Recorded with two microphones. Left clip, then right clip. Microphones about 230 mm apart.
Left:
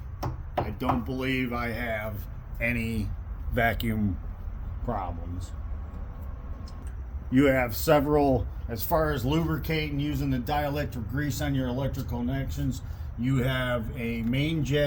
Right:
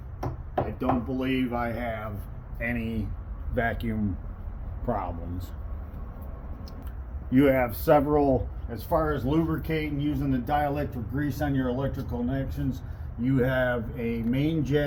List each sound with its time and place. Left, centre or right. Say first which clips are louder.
0.5 s speech: right 1 dB; left
4.9 s a man's voice: right 2 dB; centre
7.3 s speech: right 1 dB; centre
8.1 s speech: even; left
8.7 s speech: even; left